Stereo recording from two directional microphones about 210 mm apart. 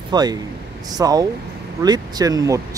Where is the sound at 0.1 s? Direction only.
20° right (ahead or behind).